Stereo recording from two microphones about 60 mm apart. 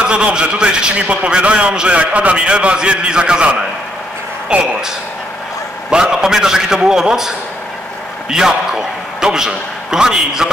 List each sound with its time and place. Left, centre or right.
0.0 s a man's voice: centre
5.9 s a man's voice: centre